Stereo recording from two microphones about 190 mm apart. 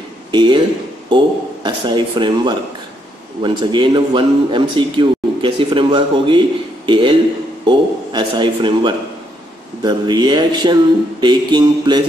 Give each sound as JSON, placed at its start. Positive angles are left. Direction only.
{"t": 0.3, "sound": "a man's voice", "side_deg": -25}